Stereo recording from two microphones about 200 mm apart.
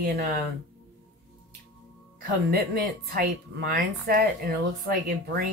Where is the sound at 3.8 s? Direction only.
50° right (ahead or behind).